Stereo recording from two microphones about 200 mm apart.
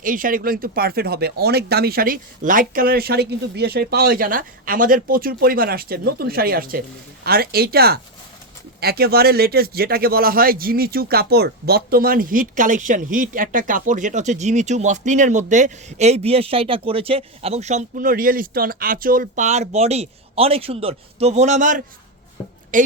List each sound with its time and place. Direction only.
0.0 s speech: 45° right (ahead or behind)